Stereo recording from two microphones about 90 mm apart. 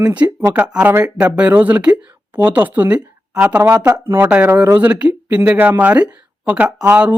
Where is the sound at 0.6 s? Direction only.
10° right (ahead or behind).